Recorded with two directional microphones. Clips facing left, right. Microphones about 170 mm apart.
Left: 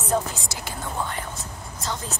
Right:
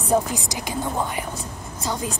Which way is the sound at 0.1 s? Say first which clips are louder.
Right 5 dB; 15° right (ahead or behind).